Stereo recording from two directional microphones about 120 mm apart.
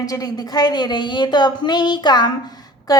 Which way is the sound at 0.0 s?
30° left (ahead or behind).